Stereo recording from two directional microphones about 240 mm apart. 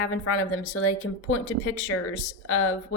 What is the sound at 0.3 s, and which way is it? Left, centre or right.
Speech, left.